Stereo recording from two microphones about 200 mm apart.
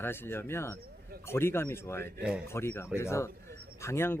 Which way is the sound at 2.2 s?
5° right (ahead or behind).